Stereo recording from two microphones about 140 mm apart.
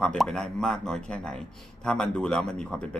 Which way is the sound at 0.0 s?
5° left (ahead or behind).